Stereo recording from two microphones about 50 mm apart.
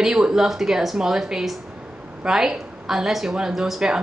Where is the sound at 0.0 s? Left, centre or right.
Centre.